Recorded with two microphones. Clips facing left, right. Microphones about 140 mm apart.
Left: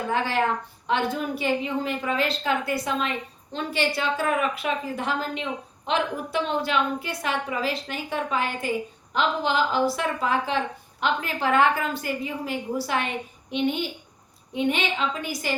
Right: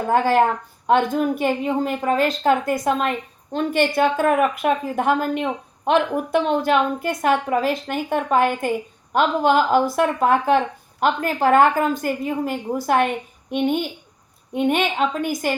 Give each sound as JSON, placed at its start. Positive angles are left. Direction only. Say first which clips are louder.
{"t": 0.1, "sound": "a woman's voice", "louder": "right 8 dB", "side_deg": -45}